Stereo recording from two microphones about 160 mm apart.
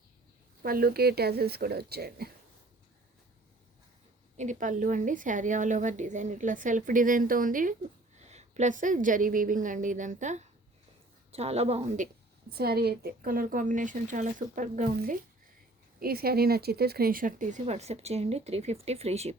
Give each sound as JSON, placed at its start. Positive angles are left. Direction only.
{"t": 0.6, "sound": "speech", "side_deg": -65}
{"t": 4.4, "sound": "a woman's voice", "side_deg": -50}
{"t": 8.2, "sound": "a woman's voice", "side_deg": -45}
{"t": 12.5, "sound": "a woman's voice", "side_deg": -75}
{"t": 16.0, "sound": "a woman's voice", "side_deg": -70}